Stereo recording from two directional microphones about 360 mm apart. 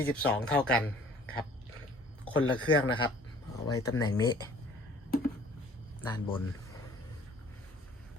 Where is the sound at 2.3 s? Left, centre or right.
Left.